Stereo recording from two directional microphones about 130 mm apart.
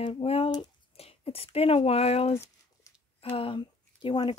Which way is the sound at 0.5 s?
45° left (ahead or behind).